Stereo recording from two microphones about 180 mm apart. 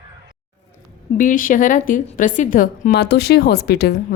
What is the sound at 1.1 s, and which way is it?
A woman's voice, 50° left (ahead or behind).